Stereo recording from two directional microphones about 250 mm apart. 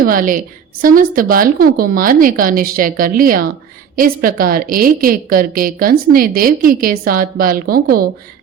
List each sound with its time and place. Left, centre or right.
0.0 s a woman's voice: right